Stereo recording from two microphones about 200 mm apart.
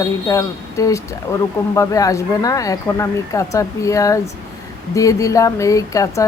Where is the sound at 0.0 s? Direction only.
15° left (ahead or behind).